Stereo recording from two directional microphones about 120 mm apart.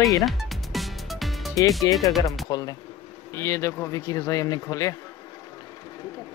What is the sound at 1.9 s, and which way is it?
Speech, 35° left (ahead or behind).